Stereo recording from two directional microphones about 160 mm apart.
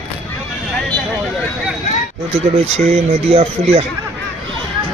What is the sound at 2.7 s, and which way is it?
Speech, 40° right (ahead or behind).